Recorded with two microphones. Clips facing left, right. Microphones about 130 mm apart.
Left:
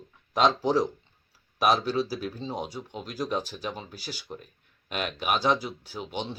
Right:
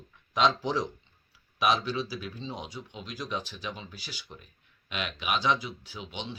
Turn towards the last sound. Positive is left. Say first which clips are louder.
# left 5 dB
turn(degrees=45)  # may be behind; listen again after turning